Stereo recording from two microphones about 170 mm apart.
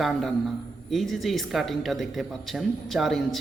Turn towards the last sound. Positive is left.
turn(degrees=0)  # may be behind; listen again after turning